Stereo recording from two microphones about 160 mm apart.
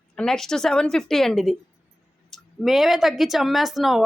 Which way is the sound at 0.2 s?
5° left (ahead or behind).